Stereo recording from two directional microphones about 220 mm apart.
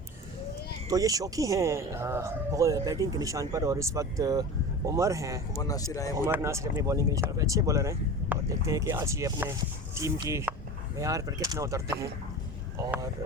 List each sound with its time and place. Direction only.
0.9 s speech: 15° right (ahead or behind)
5.6 s speech: 15° left (ahead or behind)
6.1 s speech: 10° right (ahead or behind)